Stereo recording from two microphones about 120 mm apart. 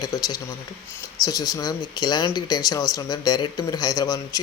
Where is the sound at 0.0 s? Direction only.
30° left (ahead or behind).